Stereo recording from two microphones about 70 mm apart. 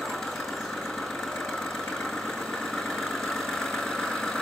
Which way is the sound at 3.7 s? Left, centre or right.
Centre.